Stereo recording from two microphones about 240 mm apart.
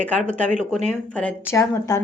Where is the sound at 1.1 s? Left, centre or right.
Centre.